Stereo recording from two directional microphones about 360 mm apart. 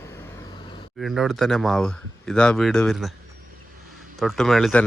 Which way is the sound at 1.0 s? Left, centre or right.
Centre.